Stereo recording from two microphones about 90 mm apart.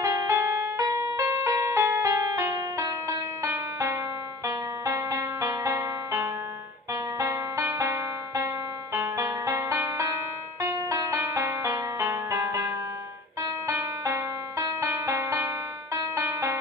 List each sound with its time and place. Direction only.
0.0 s music: 40° right (ahead or behind)
3.4 s music: 30° right (ahead or behind)